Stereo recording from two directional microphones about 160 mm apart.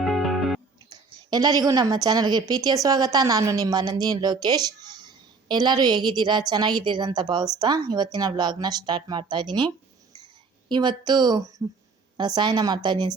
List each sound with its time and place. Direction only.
0.0 s music: centre (ahead or behind)
0.9 s a woman's voice: 25° right (ahead or behind)